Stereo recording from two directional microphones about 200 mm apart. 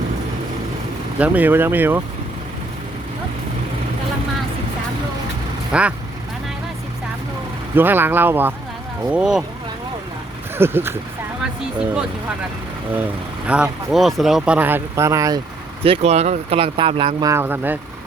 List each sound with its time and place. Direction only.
1.2 s speech: 10° right (ahead or behind)
5.7 s speech: 5° right (ahead or behind)
7.8 s speech: 10° right (ahead or behind)
10.6 s speech: 10° right (ahead or behind)
13.5 s speech: 5° right (ahead or behind)
15.8 s speech: 30° right (ahead or behind); by 17.7 s 10° right (ahead or behind)